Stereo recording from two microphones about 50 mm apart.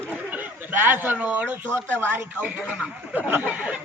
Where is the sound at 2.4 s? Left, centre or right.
Right.